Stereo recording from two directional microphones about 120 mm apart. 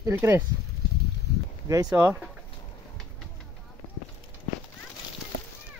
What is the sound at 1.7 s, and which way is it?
Speech, 30° right (ahead or behind).